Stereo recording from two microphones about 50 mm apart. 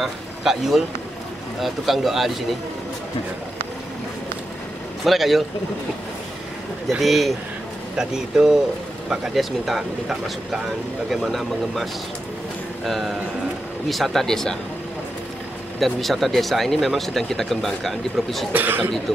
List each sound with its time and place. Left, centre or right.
0.0 s speech: centre
5.0 s speech: centre
7.0 s speech: centre
8.0 s speech: centre
15.8 s speech: centre
18.5 s speech: right